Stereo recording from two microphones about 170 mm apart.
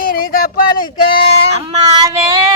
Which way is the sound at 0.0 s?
55° left (ahead or behind).